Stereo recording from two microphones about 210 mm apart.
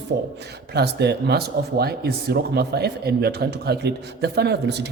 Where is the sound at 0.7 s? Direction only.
50° right (ahead or behind).